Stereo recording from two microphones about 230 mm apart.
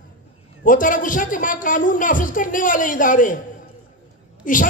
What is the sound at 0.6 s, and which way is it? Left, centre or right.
Speech, left.